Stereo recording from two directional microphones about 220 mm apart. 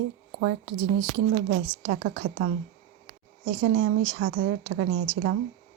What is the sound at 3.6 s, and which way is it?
Speech, 40° right (ahead or behind).